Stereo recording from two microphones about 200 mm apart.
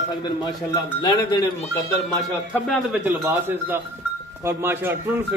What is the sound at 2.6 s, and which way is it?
Speech, 10° right (ahead or behind).